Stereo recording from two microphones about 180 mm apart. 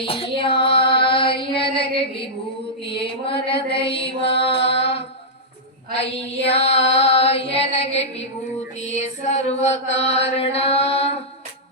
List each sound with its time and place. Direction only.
0.0 s female singing: 30° left (ahead or behind)
3.0 s mantra: 30° left (ahead or behind)
4.6 s music: 30° left (ahead or behind)
6.1 s a sound: 35° left (ahead or behind)
8.8 s mantra: 40° left (ahead or behind)